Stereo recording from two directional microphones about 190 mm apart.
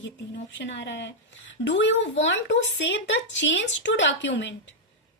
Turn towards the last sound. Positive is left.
turn(degrees=70)  # may be behind; listen again after turning